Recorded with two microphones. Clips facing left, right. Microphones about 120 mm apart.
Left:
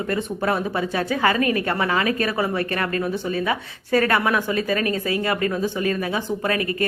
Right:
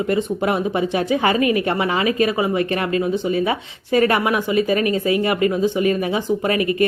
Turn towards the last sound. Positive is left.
turn(degrees=-20)  # may be behind; listen again after turning